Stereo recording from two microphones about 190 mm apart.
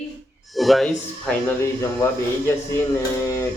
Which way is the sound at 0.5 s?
Centre (ahead or behind).